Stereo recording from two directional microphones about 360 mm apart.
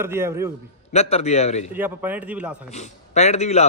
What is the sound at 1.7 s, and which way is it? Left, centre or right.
Speech, centre.